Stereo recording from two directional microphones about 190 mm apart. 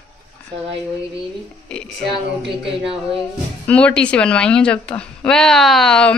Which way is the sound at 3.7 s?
5° left (ahead or behind).